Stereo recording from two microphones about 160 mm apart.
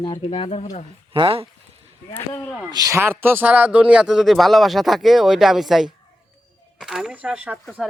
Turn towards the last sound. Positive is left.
turn(degrees=0)  # may be behind; listen again after turning